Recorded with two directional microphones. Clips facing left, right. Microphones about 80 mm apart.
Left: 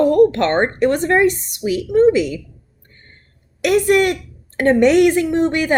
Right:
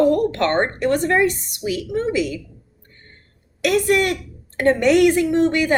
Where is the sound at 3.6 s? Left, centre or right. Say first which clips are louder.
Left 3 dB; left.